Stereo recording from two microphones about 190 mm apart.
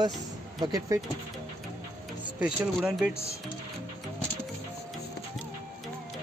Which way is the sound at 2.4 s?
5° right (ahead or behind).